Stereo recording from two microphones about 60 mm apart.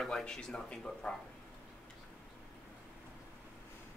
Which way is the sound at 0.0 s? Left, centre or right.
Centre.